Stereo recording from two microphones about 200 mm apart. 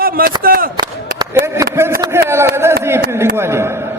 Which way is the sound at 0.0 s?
45° right (ahead or behind).